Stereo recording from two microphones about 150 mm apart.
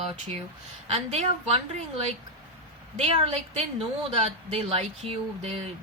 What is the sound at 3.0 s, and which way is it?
Speech, 40° right (ahead or behind).